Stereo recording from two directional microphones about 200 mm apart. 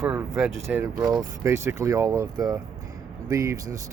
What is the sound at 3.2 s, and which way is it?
Speech, 15° right (ahead or behind).